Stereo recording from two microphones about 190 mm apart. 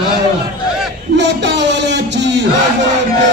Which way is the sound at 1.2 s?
70° right (ahead or behind).